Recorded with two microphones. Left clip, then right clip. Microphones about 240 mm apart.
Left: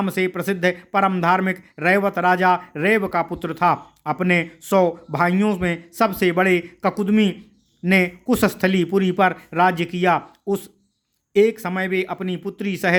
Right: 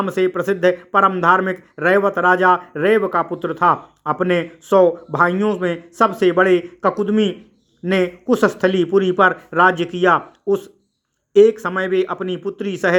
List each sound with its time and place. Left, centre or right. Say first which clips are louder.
0.0 s speech: right 4 dB; left